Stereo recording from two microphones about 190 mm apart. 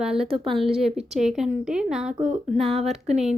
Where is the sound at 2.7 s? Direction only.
35° right (ahead or behind).